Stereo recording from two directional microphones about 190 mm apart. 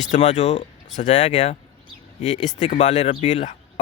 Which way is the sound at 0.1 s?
35° left (ahead or behind).